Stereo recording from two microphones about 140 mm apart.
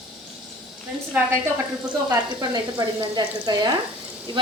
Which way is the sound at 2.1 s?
25° right (ahead or behind).